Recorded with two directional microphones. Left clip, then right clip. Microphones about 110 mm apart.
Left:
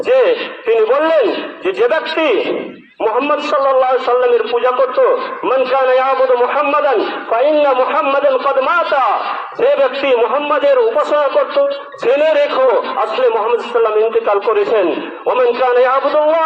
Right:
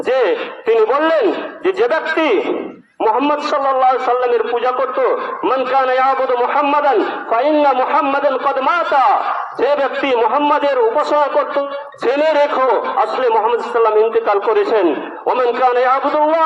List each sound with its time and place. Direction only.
0.1 s a man's voice: 45° right (ahead or behind)